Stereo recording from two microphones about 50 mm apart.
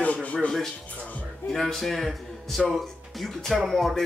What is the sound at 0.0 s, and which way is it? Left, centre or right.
Music, left.